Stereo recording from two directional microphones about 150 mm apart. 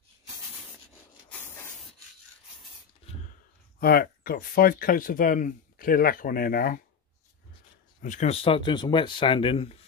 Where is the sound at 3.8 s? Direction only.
85° left.